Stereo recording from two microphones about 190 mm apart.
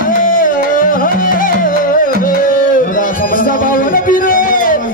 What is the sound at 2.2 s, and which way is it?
Music, 45° left (ahead or behind).